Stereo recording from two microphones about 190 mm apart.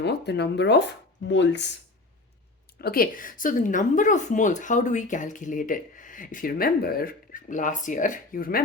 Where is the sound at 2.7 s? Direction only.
50° left (ahead or behind).